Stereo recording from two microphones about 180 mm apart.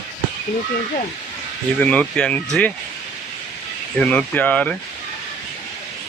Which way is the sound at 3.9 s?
5° left (ahead or behind).